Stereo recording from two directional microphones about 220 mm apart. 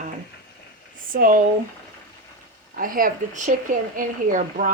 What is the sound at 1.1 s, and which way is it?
Speech, 40° right (ahead or behind).